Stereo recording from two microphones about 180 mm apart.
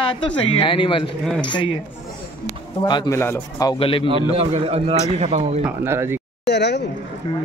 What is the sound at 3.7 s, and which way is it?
Speech, 30° left (ahead or behind).